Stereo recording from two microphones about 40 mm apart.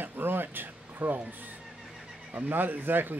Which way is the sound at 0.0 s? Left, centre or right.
Right.